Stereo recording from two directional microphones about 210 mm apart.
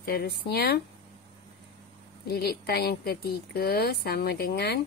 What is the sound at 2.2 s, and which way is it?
Speech, 45° left (ahead or behind).